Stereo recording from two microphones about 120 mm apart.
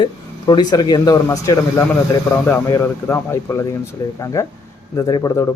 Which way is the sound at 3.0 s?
20° left (ahead or behind).